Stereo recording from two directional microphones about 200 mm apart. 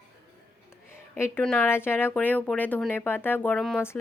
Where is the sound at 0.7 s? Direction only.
10° left (ahead or behind).